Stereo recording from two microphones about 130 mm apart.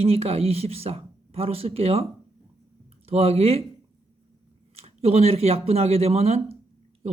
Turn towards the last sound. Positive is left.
turn(degrees=-50)  # may be behind; listen again after turning